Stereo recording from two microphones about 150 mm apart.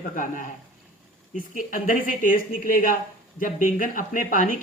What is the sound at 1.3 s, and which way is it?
Speech, 60° left (ahead or behind).